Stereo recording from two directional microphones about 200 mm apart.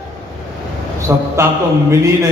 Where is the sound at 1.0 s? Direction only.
15° right (ahead or behind).